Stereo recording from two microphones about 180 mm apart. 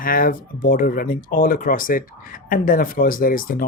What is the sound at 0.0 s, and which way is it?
Speech, 50° left (ahead or behind).